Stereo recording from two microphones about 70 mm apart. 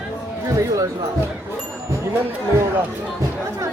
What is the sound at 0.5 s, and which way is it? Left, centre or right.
Speech, right.